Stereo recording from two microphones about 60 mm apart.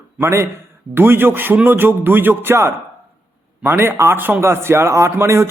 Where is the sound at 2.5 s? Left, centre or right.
Right.